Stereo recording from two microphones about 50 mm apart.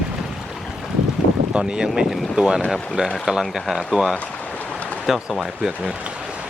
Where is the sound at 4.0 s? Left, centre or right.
Right.